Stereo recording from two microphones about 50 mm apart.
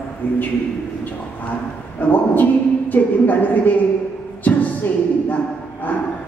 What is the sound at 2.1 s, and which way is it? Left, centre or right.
A woman's voice, left.